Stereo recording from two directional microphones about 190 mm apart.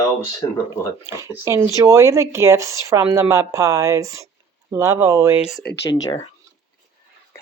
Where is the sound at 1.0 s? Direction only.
15° right (ahead or behind).